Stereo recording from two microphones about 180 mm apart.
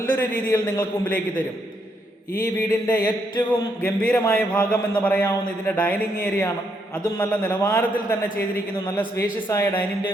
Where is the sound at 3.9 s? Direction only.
15° left (ahead or behind).